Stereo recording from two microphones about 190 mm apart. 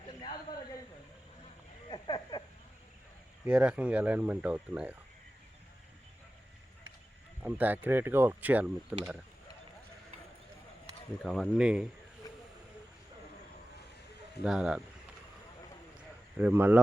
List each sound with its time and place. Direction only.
1.9 s a sound: 25° left (ahead or behind)
3.4 s speech: 5° right (ahead or behind)
7.4 s speech: 10° right (ahead or behind)
11.2 s speech: centre (ahead or behind)
12.2 s vehicle: 20° left (ahead or behind)
14.4 s speech: 5° right (ahead or behind)
16.0 s a sound: 10° right (ahead or behind)